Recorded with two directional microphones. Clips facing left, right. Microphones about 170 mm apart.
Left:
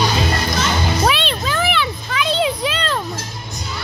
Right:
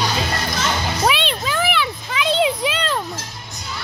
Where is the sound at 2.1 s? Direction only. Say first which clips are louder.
Right 1 dB; 20° right (ahead or behind).